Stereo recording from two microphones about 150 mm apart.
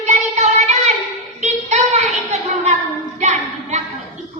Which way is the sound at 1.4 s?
50° right (ahead or behind).